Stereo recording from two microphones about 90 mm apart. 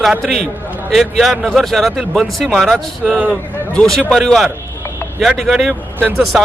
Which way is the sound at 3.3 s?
15° left (ahead or behind).